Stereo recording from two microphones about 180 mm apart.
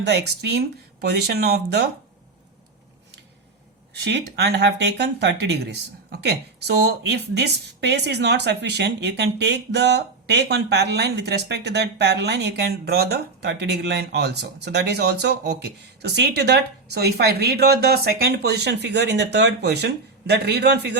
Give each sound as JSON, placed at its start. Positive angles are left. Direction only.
{"t": 0.0, "sound": "speech", "side_deg": -65}
{"t": 3.9, "sound": "speech", "side_deg": -70}